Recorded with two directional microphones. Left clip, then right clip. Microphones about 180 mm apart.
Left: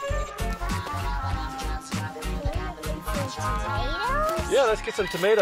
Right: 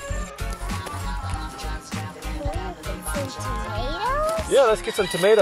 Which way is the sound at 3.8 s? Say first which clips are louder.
Right 4 dB; 15° left (ahead or behind).